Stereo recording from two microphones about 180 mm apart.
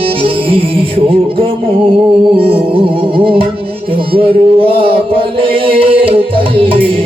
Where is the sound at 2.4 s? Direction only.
30° right (ahead or behind).